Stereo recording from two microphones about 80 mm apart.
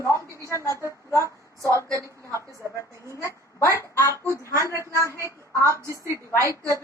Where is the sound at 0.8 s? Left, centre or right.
Right.